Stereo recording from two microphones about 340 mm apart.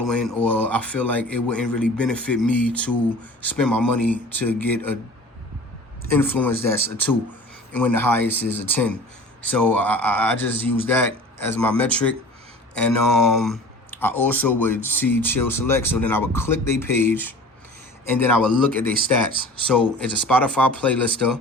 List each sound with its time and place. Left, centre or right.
0.1 s speech: centre
6.1 s speech: centre
18.7 s speech: right
20.0 s speech: centre